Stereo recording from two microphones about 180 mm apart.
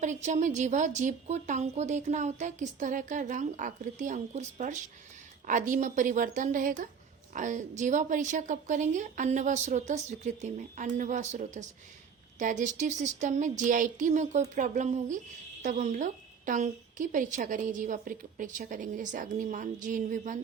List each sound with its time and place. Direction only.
0.0 s a woman's voice: 40° right (ahead or behind)